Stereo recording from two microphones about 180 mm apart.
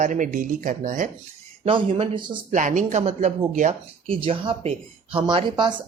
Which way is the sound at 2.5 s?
45° right (ahead or behind).